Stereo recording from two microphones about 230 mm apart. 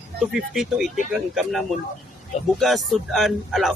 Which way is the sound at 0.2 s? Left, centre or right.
Centre.